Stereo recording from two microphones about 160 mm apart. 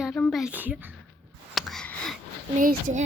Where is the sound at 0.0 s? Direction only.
5° left (ahead or behind).